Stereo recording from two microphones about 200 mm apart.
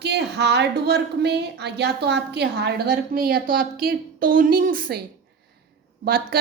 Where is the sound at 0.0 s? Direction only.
55° right (ahead or behind).